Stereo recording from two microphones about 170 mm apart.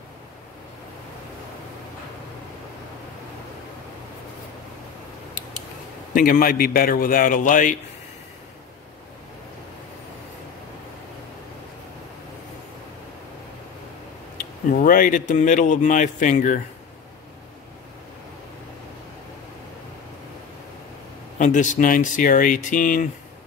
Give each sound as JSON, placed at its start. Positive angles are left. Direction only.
{"t": 6.1, "sound": "a man's voice", "side_deg": 55}
{"t": 14.7, "sound": "speech", "side_deg": 55}
{"t": 21.4, "sound": "speech", "side_deg": 45}